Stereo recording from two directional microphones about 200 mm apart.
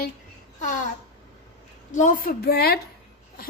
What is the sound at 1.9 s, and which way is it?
Speech, 40° left (ahead or behind).